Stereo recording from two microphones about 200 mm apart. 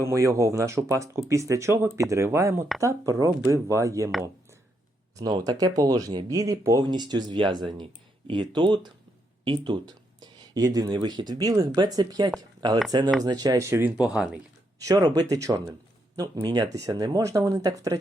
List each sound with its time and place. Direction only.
0.0 s speech: 15° right (ahead or behind)
5.1 s speech: 20° right (ahead or behind)
14.8 s speech: 15° right (ahead or behind)